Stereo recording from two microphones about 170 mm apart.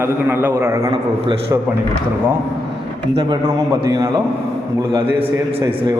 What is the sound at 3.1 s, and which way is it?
A man's voice, 25° right (ahead or behind).